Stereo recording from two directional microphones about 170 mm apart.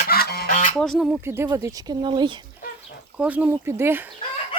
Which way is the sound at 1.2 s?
15° right (ahead or behind).